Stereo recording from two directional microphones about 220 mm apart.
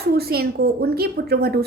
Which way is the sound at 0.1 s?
45° right (ahead or behind).